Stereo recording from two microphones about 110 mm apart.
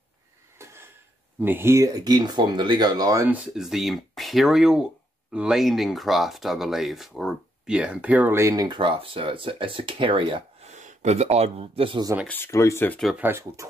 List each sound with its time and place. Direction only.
1.4 s speech: 20° right (ahead or behind)
3.3 s speech: 10° right (ahead or behind)
8.4 s speech: 30° right (ahead or behind)
8.6 s speech: 50° right (ahead or behind)
10.6 s speech: 90° right; by 12.0 s 60° right (ahead or behind)
12.3 s speech: 25° left (ahead or behind)
13.1 s speech: 20° right (ahead or behind)